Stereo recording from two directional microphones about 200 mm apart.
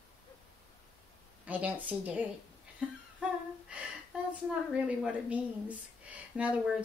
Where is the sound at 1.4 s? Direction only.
5° right (ahead or behind).